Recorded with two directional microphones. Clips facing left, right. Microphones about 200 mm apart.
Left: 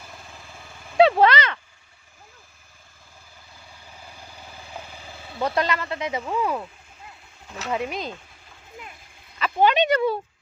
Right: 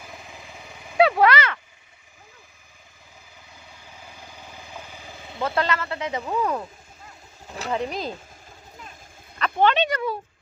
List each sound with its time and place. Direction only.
0.0 s vehicle: 15° right (ahead or behind)
0.9 s a sound: 25° left (ahead or behind)
4.3 s vehicle: 10° left (ahead or behind)
4.9 s vehicle: 15° right (ahead or behind)
5.4 s speech: 15° left (ahead or behind)
7.4 s a sound: 35° right (ahead or behind)
7.9 s speech: centre (ahead or behind)
9.4 s speech: 10° left (ahead or behind)
9.9 s speech: 30° left (ahead or behind)